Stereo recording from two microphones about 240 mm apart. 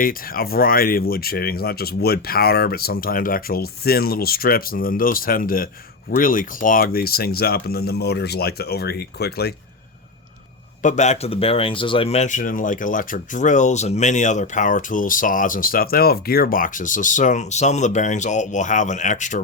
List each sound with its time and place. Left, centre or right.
0.0 s speech: left
10.8 s speech: left